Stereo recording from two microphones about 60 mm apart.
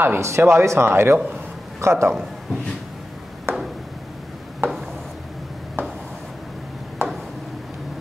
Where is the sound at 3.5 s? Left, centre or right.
Right.